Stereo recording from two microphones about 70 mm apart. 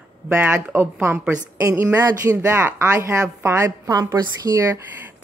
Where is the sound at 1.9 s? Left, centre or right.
Right.